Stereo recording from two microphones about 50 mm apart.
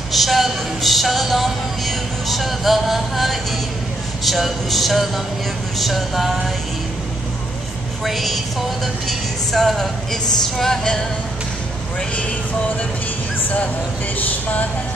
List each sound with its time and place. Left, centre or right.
0.1 s speech: centre
8.0 s speech: centre
10.6 s a sound: centre
14.1 s speech: left